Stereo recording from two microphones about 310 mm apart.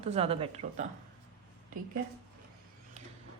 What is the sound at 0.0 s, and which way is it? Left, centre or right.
Speech, centre.